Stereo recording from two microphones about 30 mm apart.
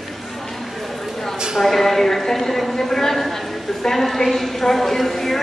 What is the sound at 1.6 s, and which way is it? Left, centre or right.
A woman's voice, centre.